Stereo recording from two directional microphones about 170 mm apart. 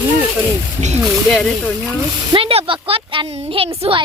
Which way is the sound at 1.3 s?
5° left (ahead or behind).